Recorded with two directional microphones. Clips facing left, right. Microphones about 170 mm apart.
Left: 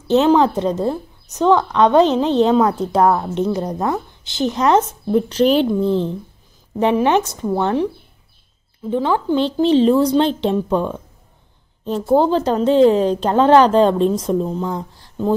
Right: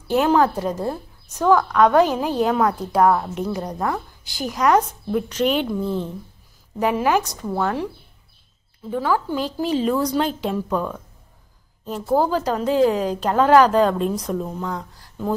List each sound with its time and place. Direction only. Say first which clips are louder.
0.1 s a woman's voice: left 4 dB; 20° left (ahead or behind)
8.9 s a woman's voice: left 4 dB; 25° left (ahead or behind)